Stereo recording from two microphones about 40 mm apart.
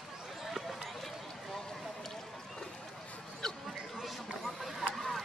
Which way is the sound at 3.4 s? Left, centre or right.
Centre.